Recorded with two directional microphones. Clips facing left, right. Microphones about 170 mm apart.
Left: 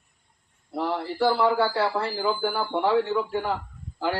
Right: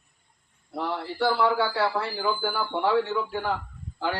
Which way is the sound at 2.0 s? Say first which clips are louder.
Left 2 dB; centre (ahead or behind).